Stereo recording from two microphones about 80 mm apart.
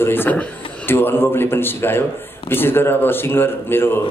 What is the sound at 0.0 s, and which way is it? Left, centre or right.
A man's voice, left.